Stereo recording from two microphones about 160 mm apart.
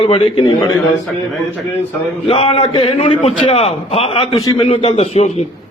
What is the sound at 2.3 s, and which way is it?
A man's voice, 40° left (ahead or behind).